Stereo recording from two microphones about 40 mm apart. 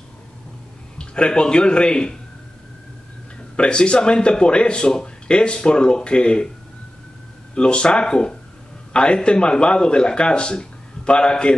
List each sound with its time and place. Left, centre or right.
0.9 s speech: left
3.5 s speech: left
7.5 s speech: left